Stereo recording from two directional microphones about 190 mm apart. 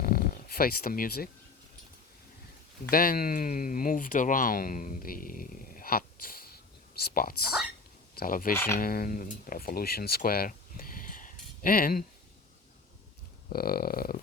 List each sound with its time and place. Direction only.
0.0 s a sound: 50° left (ahead or behind)
2.9 s speech: 50° left (ahead or behind)
13.5 s speech: 50° left (ahead or behind)